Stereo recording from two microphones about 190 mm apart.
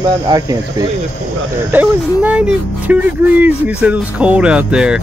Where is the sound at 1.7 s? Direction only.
10° right (ahead or behind).